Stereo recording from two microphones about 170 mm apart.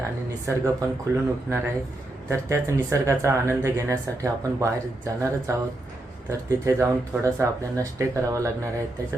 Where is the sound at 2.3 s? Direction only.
15° right (ahead or behind).